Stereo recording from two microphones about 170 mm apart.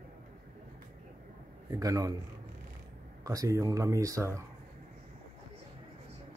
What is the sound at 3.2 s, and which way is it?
Speech, 20° right (ahead or behind).